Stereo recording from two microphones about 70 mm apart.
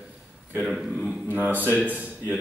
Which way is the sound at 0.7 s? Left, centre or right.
Centre.